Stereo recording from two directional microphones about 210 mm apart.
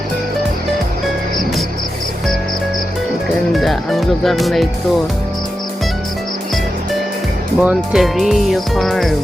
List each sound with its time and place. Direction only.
3.5 s speech: centre (ahead or behind)
7.6 s speech: 5° right (ahead or behind)